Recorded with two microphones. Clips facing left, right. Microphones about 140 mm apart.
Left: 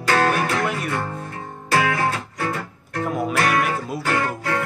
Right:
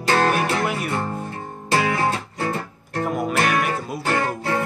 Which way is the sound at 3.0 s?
Centre (ahead or behind).